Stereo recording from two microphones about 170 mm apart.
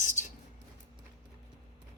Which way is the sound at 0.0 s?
45° left (ahead or behind).